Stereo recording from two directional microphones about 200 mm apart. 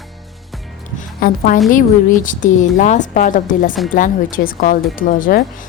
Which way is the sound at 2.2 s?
40° left (ahead or behind).